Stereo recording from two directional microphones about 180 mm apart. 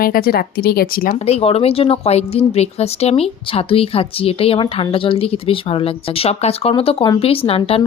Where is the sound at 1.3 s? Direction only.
35° left (ahead or behind).